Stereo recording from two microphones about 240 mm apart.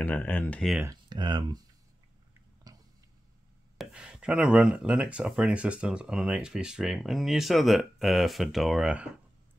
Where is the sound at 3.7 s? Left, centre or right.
Centre.